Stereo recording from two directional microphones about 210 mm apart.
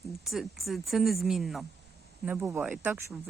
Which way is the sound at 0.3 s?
Centre (ahead or behind).